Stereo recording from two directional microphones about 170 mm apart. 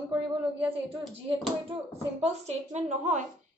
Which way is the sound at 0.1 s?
10° right (ahead or behind).